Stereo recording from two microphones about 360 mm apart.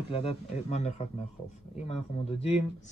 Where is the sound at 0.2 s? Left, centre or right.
Centre.